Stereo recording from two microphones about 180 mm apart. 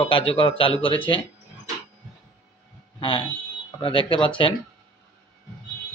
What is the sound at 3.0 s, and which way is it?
Speech, 30° left (ahead or behind).